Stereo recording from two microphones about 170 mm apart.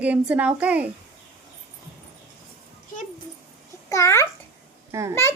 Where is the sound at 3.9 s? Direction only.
20° left (ahead or behind).